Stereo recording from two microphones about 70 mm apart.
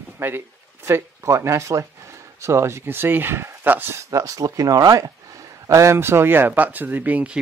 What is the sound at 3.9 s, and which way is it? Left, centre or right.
Speech, right.